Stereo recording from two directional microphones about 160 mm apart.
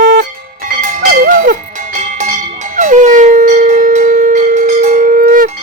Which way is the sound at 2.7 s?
50° right (ahead or behind).